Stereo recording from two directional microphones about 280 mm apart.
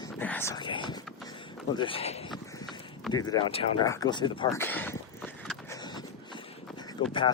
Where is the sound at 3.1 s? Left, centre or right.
Centre.